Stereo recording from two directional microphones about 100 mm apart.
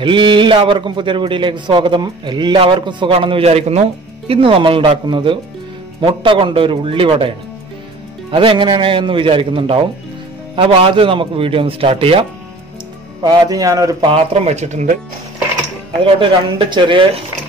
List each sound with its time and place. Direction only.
0.0 s a man's voice: 55° right (ahead or behind)
3.1 s a man's voice: 65° right (ahead or behind); by 3.8 s 90° right
4.3 s a man's voice: 60° right (ahead or behind)
13.2 s speech: 40° right (ahead or behind)
14.0 s a man's voice: 80° right
16.0 s a man's voice: 60° right (ahead or behind)